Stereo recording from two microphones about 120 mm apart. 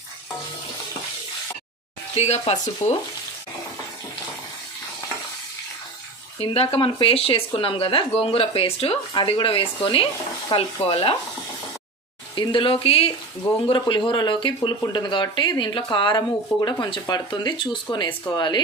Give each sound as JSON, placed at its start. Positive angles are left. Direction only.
{"t": 2.1, "sound": "speech", "side_deg": 60}
{"t": 2.8, "sound": "frying", "side_deg": 70}
{"t": 6.4, "sound": "speech", "side_deg": 55}
{"t": 12.4, "sound": "speech", "side_deg": 45}